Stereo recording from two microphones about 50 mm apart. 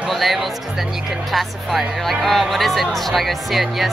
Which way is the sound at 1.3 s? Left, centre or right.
Centre.